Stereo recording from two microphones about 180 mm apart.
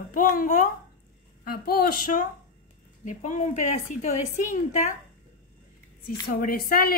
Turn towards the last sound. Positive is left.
turn(degrees=55)  # may be behind; listen again after turning